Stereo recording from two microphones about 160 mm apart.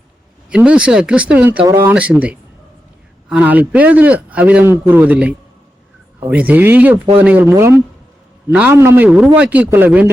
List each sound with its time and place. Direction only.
0.5 s a man's voice: 5° right (ahead or behind)